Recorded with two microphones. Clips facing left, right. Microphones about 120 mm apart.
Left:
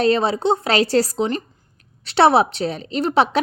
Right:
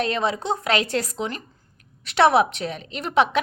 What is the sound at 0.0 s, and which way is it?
A woman's voice, 30° left (ahead or behind).